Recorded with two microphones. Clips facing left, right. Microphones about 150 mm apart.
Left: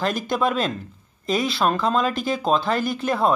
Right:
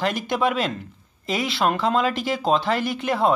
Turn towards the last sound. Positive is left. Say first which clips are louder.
# left 1 dB
turn(degrees=-25)  # may be behind; listen again after turning